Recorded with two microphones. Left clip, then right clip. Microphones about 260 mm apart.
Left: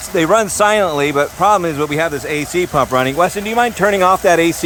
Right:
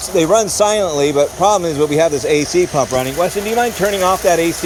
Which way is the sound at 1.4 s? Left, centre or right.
Left.